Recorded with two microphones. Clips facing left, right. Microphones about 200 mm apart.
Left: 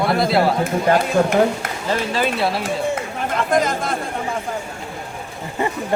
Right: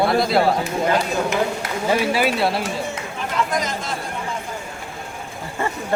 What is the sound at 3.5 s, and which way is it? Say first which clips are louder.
Speech: left 6 dB; 55° left (ahead or behind).